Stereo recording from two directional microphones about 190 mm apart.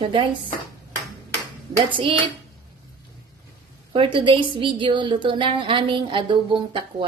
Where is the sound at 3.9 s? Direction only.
25° right (ahead or behind).